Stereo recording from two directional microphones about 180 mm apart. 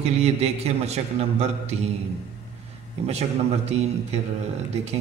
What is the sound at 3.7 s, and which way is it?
Speech, 35° right (ahead or behind).